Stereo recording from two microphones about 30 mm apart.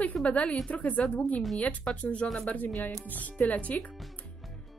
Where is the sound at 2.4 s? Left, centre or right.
Left.